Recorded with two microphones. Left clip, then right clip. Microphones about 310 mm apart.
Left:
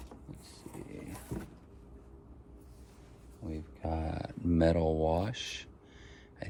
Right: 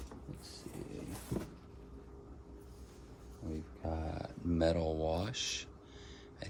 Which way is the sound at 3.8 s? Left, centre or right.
Left.